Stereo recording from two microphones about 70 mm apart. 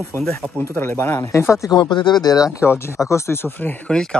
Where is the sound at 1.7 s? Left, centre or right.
Left.